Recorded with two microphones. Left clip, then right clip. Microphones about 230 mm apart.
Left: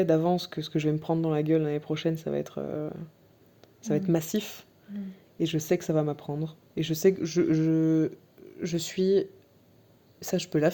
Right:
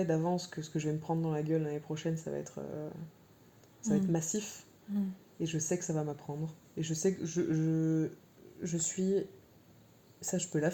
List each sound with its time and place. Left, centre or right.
0.0 s speech: left